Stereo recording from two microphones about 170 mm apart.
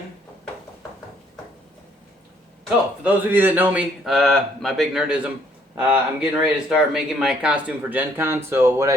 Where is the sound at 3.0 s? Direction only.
10° right (ahead or behind).